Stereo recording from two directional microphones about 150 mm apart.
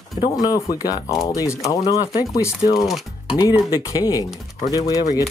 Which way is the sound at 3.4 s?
25° left (ahead or behind).